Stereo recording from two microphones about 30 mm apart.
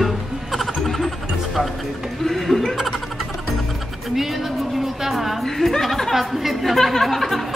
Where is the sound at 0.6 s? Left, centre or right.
Centre.